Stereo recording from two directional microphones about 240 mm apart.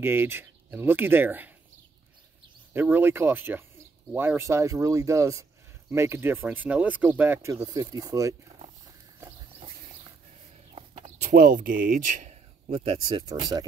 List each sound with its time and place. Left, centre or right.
0.0 s speech: centre
2.7 s speech: centre
10.7 s speech: right